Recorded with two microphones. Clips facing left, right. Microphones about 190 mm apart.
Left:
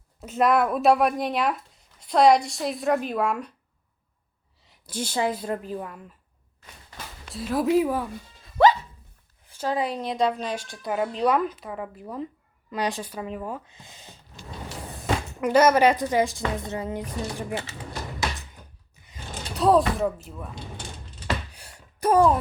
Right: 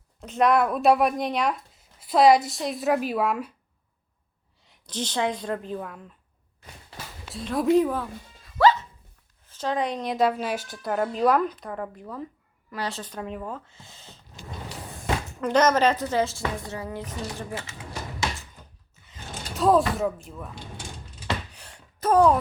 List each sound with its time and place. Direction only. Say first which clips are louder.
0.2 s speech: even; 5° left (ahead or behind)
4.6 s speech: even; 5° left (ahead or behind)
6.9 s a sound: left 1 dB; centre (ahead or behind)
8.5 s music: left 1 dB; 20° left (ahead or behind)
9.5 s a woman's voice: even; 5° left (ahead or behind)
15.4 s a woman's voice: left 2 dB; 10° left (ahead or behind)
17.5 s speech: left 4 dB; 30° left (ahead or behind)
18.9 s mechanisms: left 2 dB; 15° left (ahead or behind)
19.5 s speech: left 1 dB; centre (ahead or behind)
21.5 s gasp: even; 10° left (ahead or behind)